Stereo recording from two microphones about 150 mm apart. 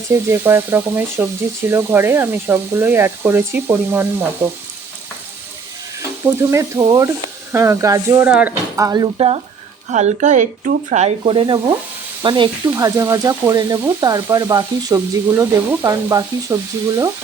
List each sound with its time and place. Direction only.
0.1 s speech: 15° right (ahead or behind)
6.4 s speech: 20° right (ahead or behind)
8.8 s speech: 25° right (ahead or behind)
9.1 s sizzle: 40° right (ahead or behind)
9.9 s speech: 55° right (ahead or behind)
11.2 s sizzle: 35° right (ahead or behind)
12.2 s speech: 30° right (ahead or behind)